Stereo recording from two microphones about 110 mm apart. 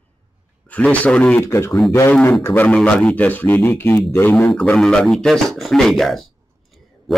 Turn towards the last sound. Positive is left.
turn(degrees=0)  # may be behind; listen again after turning